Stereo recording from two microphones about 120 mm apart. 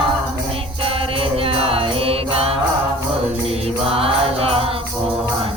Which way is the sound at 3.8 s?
55° right (ahead or behind).